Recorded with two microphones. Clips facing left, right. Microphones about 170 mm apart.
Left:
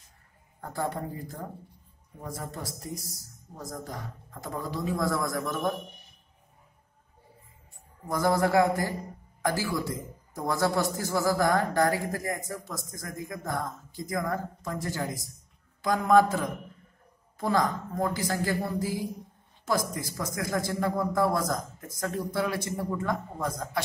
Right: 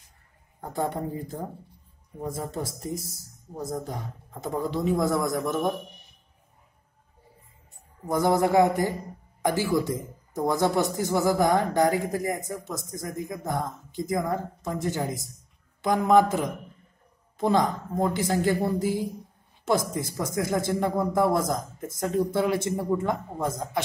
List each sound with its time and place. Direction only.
0.6 s a man's voice: 20° right (ahead or behind)
8.1 s a man's voice: 20° right (ahead or behind)